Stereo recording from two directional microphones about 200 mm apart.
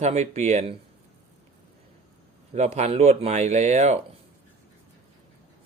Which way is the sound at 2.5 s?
35° right (ahead or behind).